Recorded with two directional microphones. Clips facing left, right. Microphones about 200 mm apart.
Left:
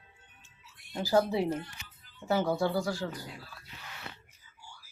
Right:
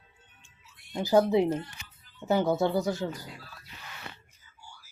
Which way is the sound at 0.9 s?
20° right (ahead or behind).